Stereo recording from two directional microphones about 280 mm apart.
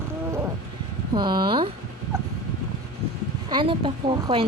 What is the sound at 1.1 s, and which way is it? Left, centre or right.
Speech, centre.